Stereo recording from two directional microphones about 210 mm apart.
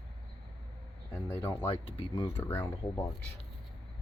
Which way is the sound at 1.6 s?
25° left (ahead or behind).